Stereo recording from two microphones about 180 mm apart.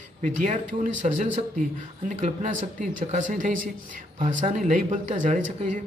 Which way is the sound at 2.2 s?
45° right (ahead or behind).